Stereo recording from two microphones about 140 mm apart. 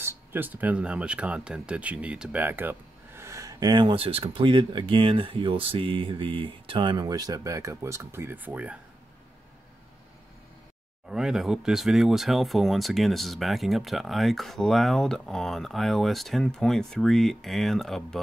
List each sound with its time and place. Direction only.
0.0 s speech: 15° right (ahead or behind)
11.1 s speech: 5° right (ahead or behind)